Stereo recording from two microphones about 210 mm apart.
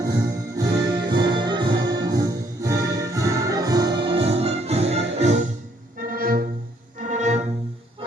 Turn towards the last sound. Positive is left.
turn(degrees=-35)  # may be behind; listen again after turning